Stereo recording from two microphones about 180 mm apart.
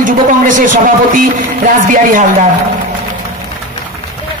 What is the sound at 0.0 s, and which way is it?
Speech, 45° right (ahead or behind).